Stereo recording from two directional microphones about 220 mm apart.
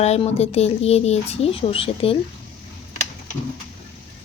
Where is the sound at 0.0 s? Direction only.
30° left (ahead or behind).